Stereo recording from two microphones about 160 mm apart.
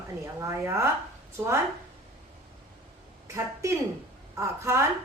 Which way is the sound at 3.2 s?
20° right (ahead or behind).